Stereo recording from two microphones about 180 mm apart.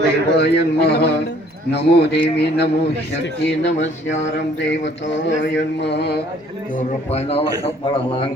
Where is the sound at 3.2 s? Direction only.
80° left.